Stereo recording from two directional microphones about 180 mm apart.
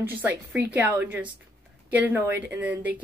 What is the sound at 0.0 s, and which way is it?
A woman's voice, 10° right (ahead or behind).